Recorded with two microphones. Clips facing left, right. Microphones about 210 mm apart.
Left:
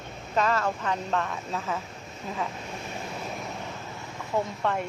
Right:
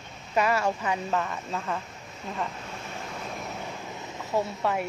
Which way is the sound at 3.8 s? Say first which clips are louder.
Right 1 dB; 20° right (ahead or behind).